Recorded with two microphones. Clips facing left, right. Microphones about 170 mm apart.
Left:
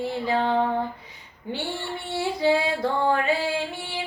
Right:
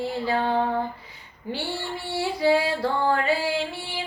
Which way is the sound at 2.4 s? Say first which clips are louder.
Right 1 dB; 20° left (ahead or behind).